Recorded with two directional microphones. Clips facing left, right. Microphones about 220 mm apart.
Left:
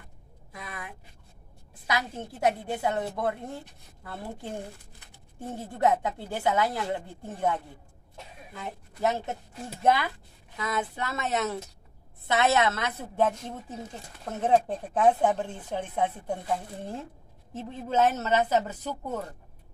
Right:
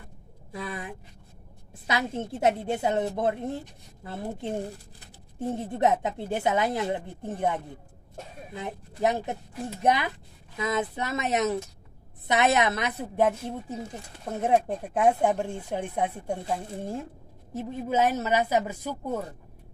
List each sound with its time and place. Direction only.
0.5 s a sound: 30° right (ahead or behind)
1.9 s a woman's voice: 25° right (ahead or behind)
17.6 s speech: 10° right (ahead or behind)